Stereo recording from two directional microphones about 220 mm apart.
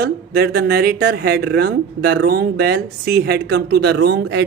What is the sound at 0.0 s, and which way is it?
Speech, 45° right (ahead or behind).